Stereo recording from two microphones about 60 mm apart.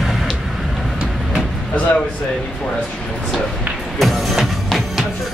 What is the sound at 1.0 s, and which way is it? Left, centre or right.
Vehicle, centre.